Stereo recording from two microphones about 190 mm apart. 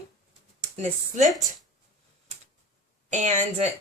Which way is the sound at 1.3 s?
Centre (ahead or behind).